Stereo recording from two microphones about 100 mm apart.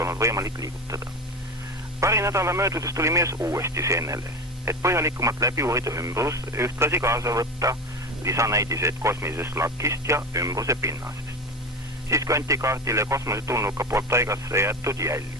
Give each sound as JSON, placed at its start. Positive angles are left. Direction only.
{"t": 0.0, "sound": "speech", "side_deg": -30}